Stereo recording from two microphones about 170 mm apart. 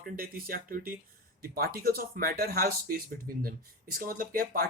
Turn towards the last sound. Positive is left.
turn(degrees=-60)  # may be behind; listen again after turning